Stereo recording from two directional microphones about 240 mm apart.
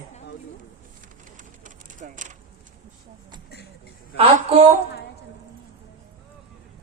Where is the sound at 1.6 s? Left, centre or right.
Right.